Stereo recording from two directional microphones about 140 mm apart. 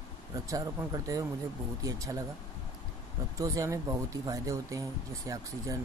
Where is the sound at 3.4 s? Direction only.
25° right (ahead or behind).